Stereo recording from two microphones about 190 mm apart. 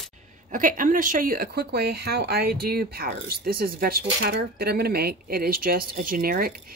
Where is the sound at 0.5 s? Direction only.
45° right (ahead or behind).